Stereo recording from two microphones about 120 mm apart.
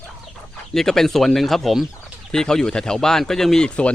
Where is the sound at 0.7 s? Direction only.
5° left (ahead or behind).